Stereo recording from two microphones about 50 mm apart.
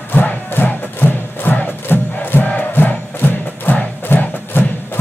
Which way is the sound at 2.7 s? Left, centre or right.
Left.